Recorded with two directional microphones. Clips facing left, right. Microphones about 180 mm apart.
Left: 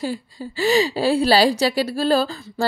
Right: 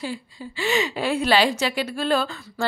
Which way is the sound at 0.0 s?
40° left (ahead or behind).